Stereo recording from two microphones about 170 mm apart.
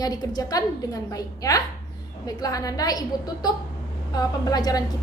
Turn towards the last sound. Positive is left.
turn(degrees=20)  # may be behind; listen again after turning